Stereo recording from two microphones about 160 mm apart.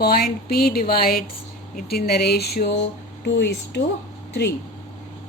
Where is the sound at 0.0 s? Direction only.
70° left (ahead or behind); by 3.8 s 90° left.